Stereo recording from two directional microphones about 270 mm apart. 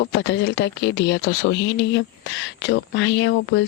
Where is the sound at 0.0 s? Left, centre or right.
Left.